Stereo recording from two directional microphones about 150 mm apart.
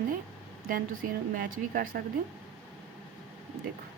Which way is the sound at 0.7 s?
70° right (ahead or behind).